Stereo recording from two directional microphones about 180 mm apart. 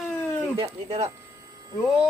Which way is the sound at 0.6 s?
30° right (ahead or behind).